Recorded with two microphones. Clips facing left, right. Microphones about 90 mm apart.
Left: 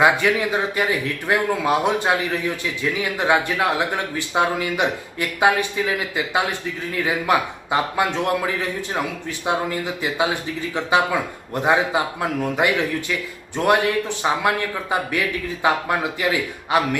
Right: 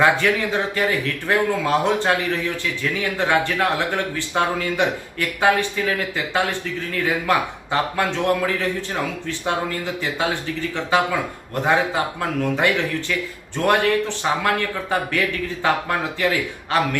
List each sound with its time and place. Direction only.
0.0 s speech: 15° left (ahead or behind)
11.5 s speech: 15° left (ahead or behind)